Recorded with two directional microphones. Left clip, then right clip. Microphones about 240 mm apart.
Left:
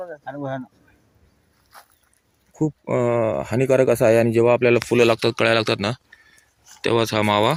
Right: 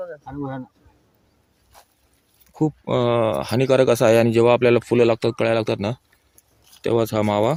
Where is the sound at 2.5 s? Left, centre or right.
Centre.